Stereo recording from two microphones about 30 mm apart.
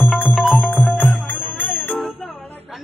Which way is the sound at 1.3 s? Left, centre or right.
Left.